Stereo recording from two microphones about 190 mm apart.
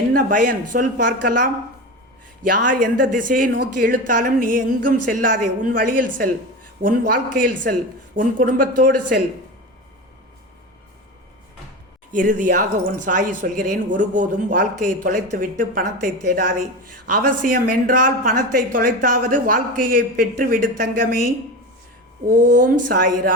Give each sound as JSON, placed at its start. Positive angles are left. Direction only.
{"t": 0.1, "sound": "speech", "side_deg": -45}
{"t": 12.1, "sound": "speech", "side_deg": -45}
{"t": 22.3, "sound": "speech", "side_deg": -45}